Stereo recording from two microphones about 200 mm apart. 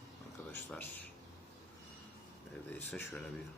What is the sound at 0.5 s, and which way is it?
Speech, 10° left (ahead or behind).